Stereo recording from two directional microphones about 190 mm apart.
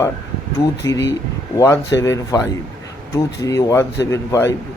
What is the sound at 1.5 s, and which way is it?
Speech, 15° left (ahead or behind).